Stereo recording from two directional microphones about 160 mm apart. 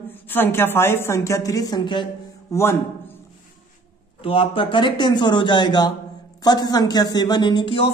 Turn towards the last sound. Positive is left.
turn(degrees=30)  # may be behind; listen again after turning